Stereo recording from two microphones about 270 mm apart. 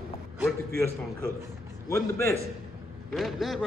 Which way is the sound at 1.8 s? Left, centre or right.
Centre.